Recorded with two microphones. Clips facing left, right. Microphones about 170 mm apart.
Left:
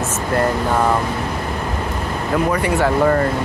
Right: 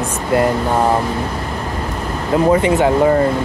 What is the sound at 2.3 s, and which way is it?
Speech, 25° right (ahead or behind).